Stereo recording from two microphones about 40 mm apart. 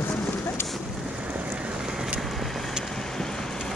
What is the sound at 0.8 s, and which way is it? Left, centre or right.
Boat, centre.